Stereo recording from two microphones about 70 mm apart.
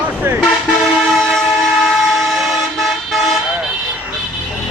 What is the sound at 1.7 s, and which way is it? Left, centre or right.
Toot, centre.